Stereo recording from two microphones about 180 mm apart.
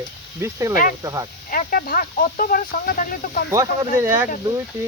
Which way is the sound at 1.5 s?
55° left (ahead or behind).